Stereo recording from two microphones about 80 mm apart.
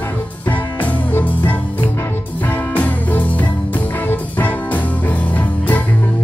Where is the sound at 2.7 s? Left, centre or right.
Centre.